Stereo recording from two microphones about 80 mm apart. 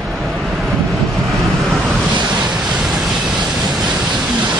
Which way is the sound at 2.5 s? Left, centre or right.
Centre.